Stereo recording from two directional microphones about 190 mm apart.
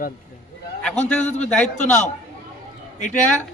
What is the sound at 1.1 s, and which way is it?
Speech, 10° left (ahead or behind).